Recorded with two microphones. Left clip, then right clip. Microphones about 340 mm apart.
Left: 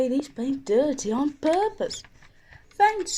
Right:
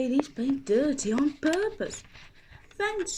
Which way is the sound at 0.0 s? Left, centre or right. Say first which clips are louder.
Left 2 dB; centre.